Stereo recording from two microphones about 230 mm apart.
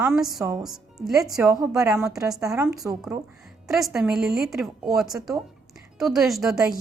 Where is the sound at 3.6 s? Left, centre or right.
Centre.